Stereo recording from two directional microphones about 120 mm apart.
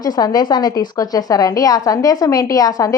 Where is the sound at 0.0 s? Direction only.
35° left (ahead or behind).